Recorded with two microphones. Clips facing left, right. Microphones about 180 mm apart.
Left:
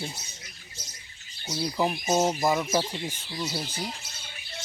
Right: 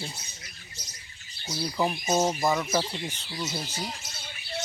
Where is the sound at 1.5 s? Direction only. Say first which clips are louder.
Left 1 dB; 10° left (ahead or behind).